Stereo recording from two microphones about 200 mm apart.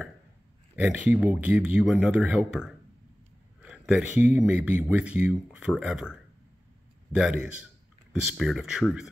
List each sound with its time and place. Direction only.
0.8 s speech: 5° right (ahead or behind)
7.2 s speech: 5° right (ahead or behind)